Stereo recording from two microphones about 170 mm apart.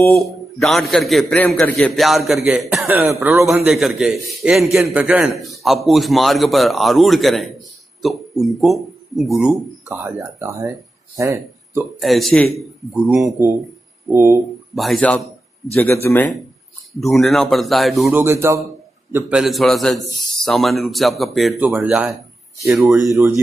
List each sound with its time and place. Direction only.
0.1 s speech: centre (ahead or behind)
1.7 s a man's voice: 15° left (ahead or behind)
2.0 s speech: centre (ahead or behind); by 3.4 s 15° right (ahead or behind)
3.4 s speech: centre (ahead or behind)
12.0 s speech: centre (ahead or behind)
14.0 s speech: 15° right (ahead or behind)
14.8 s a man's voice: 5° left (ahead or behind)
17.0 s speech: centre (ahead or behind)
18.1 s speech: 15° right (ahead or behind)
23.0 s speech: 15° right (ahead or behind)